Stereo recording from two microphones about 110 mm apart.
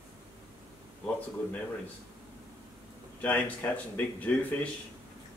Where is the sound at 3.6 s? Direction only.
20° left (ahead or behind).